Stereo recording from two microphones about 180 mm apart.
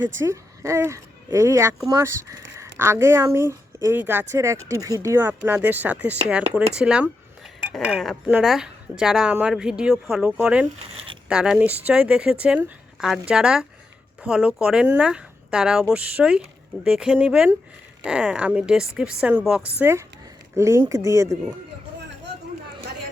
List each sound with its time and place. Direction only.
0.2 s a woman's voice: 15° right (ahead or behind)
19.8 s speech: 15° right (ahead or behind)